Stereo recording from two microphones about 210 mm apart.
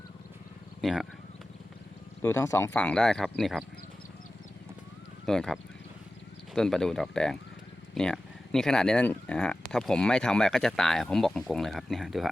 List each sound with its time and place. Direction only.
0.8 s speech: centre (ahead or behind)
2.2 s speech: 15° left (ahead or behind)
5.2 s speech: 5° left (ahead or behind)